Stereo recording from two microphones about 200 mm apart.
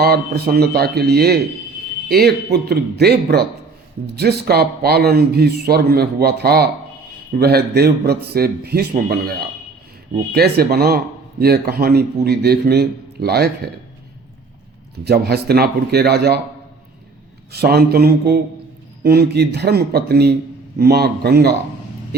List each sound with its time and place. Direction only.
0.0 s speech: 50° right (ahead or behind)
10.3 s speech: 50° right (ahead or behind)
15.0 s speech: 50° right (ahead or behind)
17.5 s speech: 55° right (ahead or behind)